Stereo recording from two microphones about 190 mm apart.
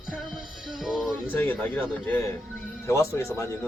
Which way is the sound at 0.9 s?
5° right (ahead or behind).